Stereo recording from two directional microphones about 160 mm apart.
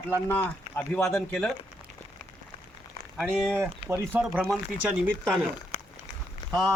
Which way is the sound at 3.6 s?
15° right (ahead or behind).